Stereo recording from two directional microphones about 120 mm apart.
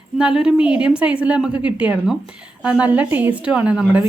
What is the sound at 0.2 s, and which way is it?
A woman's voice, 5° right (ahead or behind).